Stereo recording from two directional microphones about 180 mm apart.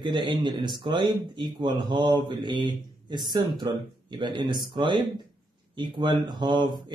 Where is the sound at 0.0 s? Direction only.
25° right (ahead or behind).